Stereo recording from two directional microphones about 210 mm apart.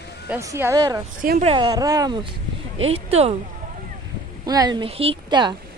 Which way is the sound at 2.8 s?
30° right (ahead or behind).